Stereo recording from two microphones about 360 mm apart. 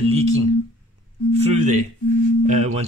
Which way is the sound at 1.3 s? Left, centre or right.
Centre.